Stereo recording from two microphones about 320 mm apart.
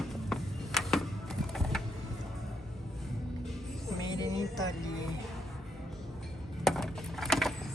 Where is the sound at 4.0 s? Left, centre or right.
Centre.